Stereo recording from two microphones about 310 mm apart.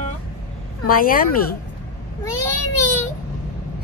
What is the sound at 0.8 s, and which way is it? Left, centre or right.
Speech, left.